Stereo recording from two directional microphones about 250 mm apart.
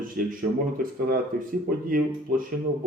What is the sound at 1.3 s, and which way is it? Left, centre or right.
Speech, right.